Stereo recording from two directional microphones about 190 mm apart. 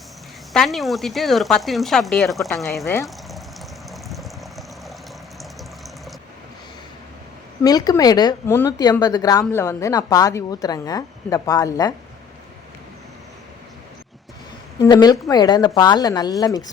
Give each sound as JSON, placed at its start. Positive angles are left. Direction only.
{"t": 0.5, "sound": "speech", "side_deg": 0}
{"t": 2.8, "sound": "speech", "side_deg": 15}
{"t": 3.8, "sound": "vehicle", "side_deg": 0}
{"t": 7.6, "sound": "speech", "side_deg": 20}
{"t": 14.8, "sound": "speech", "side_deg": 20}